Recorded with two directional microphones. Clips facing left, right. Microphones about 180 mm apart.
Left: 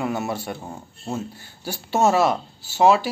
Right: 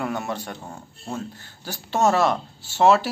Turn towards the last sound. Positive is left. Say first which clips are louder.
# even
turn(degrees=5)  # may be behind; listen again after turning